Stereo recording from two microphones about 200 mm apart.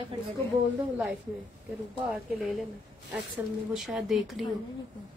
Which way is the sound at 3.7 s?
Centre (ahead or behind).